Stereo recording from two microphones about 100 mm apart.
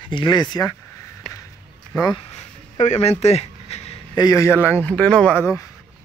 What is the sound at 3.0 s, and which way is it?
Speech, 90° left.